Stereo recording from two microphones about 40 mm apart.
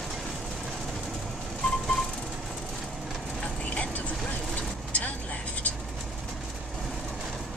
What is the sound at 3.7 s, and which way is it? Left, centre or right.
Vehicle, left.